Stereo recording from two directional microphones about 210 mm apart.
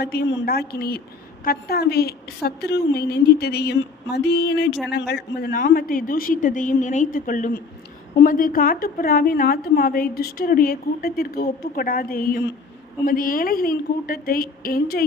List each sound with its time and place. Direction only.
0.0 s a woman's voice: 50° left (ahead or behind)